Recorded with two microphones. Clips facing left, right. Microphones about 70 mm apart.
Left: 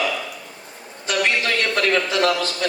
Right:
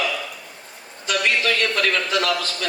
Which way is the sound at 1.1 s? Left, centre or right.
Left.